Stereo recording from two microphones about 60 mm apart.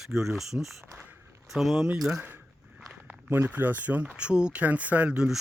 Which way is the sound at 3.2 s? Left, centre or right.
Right.